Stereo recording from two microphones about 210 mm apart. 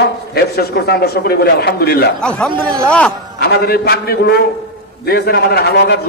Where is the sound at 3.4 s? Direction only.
50° left (ahead or behind).